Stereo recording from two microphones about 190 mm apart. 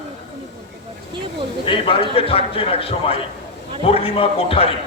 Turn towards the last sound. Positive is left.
turn(degrees=30)  # may be behind; listen again after turning